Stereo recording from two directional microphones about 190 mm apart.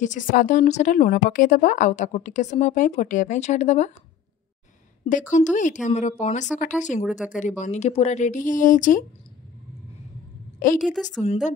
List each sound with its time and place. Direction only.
0.0 s speech: 45° left (ahead or behind)
5.3 s speech: 40° left (ahead or behind)
7.0 s a woman's voice: 5° right (ahead or behind)
7.2 s speech: 40° left (ahead or behind)
10.8 s a woman's voice: centre (ahead or behind)